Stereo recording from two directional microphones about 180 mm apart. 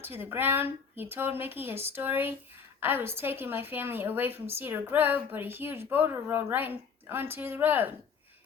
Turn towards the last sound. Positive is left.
turn(degrees=-10)  # may be behind; listen again after turning